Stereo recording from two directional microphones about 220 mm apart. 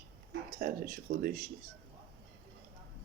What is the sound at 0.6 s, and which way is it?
Speech, 40° right (ahead or behind).